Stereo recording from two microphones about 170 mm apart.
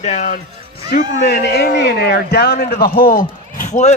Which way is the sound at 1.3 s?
80° left.